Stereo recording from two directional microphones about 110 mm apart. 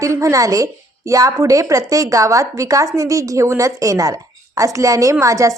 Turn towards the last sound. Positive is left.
turn(degrees=-30)  # may be behind; listen again after turning